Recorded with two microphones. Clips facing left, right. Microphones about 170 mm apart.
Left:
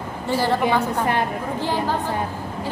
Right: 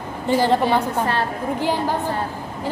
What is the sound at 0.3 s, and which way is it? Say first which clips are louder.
Speech: right 4 dB; 15° right (ahead or behind).